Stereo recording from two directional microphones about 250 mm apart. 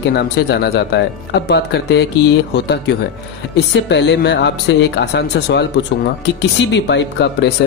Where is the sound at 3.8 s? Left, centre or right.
Left.